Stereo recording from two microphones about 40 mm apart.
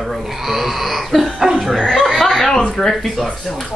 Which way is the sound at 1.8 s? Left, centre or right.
Centre.